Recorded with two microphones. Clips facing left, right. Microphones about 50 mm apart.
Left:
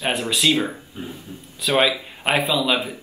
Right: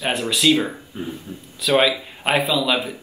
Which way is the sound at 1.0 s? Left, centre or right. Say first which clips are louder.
Right 4 dB; right.